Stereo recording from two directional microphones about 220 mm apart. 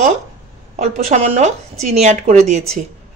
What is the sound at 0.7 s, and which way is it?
Speech, 30° right (ahead or behind).